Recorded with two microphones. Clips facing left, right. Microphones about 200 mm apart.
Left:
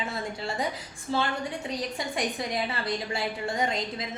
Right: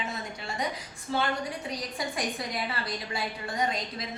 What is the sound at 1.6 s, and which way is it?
A woman's voice, 25° left (ahead or behind).